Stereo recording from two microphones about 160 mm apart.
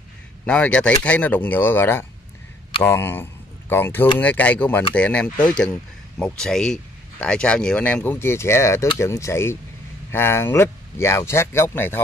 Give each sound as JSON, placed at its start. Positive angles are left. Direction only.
{"t": 0.5, "sound": "speech", "side_deg": 5}